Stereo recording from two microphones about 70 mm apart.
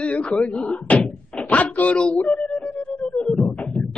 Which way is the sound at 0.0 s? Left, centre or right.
Centre.